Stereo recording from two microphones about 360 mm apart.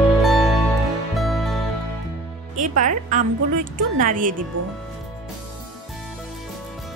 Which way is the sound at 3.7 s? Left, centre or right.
Right.